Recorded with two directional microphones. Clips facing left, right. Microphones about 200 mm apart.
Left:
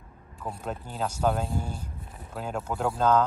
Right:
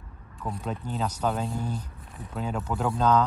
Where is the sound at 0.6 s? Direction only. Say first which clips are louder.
Right 1 dB; 50° left (ahead or behind).